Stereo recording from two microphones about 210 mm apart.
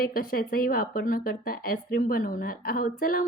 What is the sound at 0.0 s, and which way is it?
A woman's voice, 45° left (ahead or behind).